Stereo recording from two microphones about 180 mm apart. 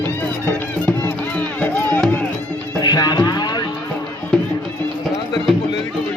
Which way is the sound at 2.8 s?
25° left (ahead or behind).